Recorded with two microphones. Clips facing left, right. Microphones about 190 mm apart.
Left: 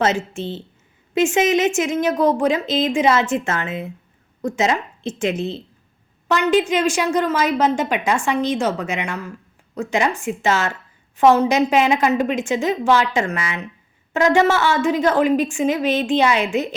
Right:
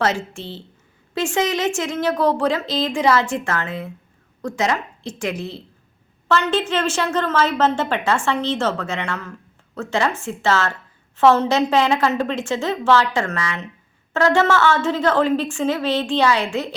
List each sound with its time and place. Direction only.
0.3 s a woman's voice: 20° left (ahead or behind)